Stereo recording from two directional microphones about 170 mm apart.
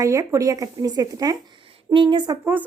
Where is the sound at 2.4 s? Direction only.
10° right (ahead or behind).